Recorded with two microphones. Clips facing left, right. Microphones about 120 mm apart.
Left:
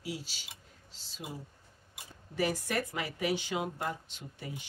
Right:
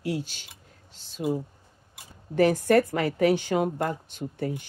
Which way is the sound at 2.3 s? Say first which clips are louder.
Right 12 dB; 55° right (ahead or behind).